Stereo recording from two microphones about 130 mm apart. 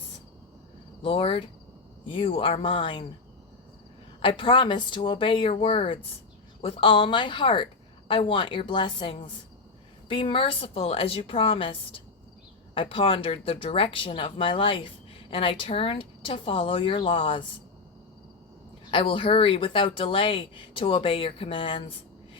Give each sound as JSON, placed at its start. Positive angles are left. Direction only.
{"t": 1.0, "sound": "speech", "side_deg": 45}
{"t": 4.2, "sound": "speech", "side_deg": 40}
{"t": 18.9, "sound": "speech", "side_deg": 40}